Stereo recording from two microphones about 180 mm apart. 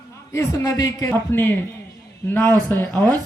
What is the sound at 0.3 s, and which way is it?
A man's voice, 15° left (ahead or behind).